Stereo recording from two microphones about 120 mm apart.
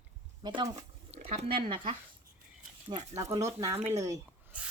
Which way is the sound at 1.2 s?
55° right (ahead or behind).